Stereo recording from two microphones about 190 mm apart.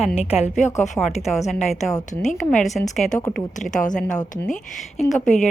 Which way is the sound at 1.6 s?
35° left (ahead or behind).